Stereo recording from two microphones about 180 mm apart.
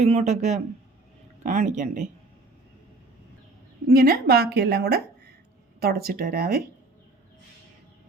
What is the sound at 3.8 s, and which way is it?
A woman's voice, 60° right (ahead or behind).